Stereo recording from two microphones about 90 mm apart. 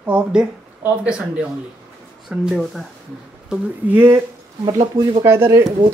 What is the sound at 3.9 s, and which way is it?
Speech, 30° right (ahead or behind).